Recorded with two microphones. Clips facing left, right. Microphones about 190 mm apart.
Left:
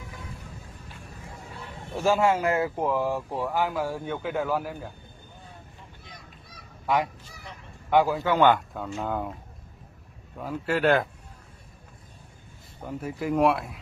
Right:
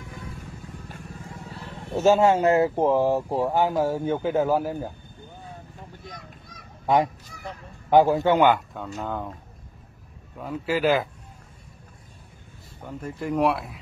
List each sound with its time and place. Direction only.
2.0 s speech: 25° right (ahead or behind)
6.9 s honk: 35° right (ahead or behind)
8.4 s speech: 10° right (ahead or behind)
10.3 s speech: centre (ahead or behind)
12.8 s speech: 5° left (ahead or behind)